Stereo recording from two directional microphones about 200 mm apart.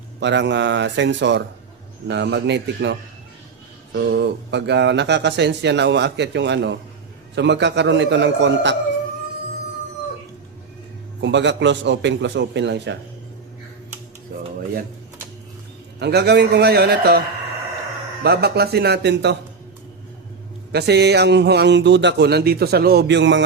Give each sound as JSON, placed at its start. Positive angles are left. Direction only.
{"t": 0.2, "sound": "speech", "side_deg": -65}
{"t": 11.2, "sound": "speech", "side_deg": -65}
{"t": 14.3, "sound": "a sound", "side_deg": -50}
{"t": 16.0, "sound": "a man's voice", "side_deg": -55}
{"t": 20.7, "sound": "speech", "side_deg": -55}